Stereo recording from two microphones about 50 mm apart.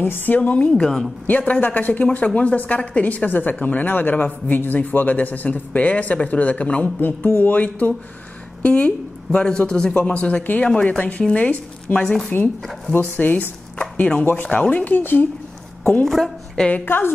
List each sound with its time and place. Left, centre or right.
0.0 s speech: left
0.4 s speech: left
0.7 s a man's voice: centre
1.4 s speech: left
9.4 s a man's voice: centre
9.9 s speech: left
11.0 s speech: left
13.0 s speech: left
14.9 s speech: left
15.8 s a woman's voice: left
16.8 s a woman's voice: left